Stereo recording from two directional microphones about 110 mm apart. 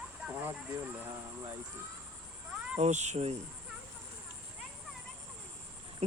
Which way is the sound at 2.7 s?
90° right.